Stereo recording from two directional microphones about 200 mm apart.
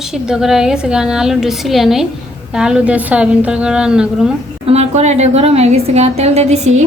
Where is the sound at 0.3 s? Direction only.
5° right (ahead or behind).